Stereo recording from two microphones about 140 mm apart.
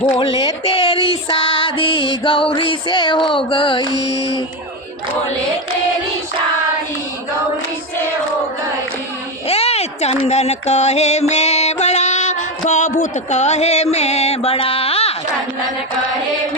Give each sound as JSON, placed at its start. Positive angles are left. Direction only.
{"t": 0.0, "sound": "music", "side_deg": 35}
{"t": 9.5, "sound": "speech", "side_deg": 45}